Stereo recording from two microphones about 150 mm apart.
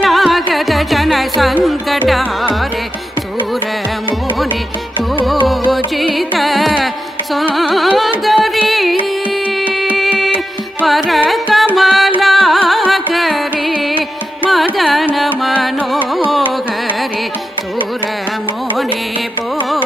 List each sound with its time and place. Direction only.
0.0 s music: centre (ahead or behind)
5.9 s music: centre (ahead or behind)
7.5 s carnatic music: centre (ahead or behind)
8.3 s music: centre (ahead or behind)
10.9 s carnatic music: centre (ahead or behind)
11.7 s music: centre (ahead or behind)
14.5 s carnatic music: centre (ahead or behind)
15.4 s music: centre (ahead or behind)